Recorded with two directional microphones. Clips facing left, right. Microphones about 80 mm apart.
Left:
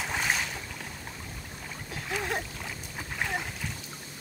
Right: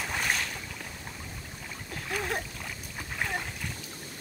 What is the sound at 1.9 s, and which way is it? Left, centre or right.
Splash, centre.